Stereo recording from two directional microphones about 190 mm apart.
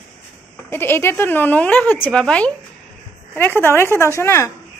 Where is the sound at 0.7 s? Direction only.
10° left (ahead or behind).